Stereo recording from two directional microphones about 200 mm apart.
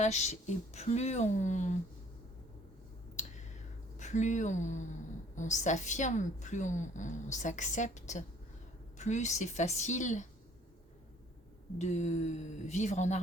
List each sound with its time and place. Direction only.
0.0 s a woman's voice: 35° left (ahead or behind)
3.2 s a sound: 35° left (ahead or behind)
3.9 s a woman's voice: 35° left (ahead or behind)
11.8 s a woman's voice: 35° left (ahead or behind)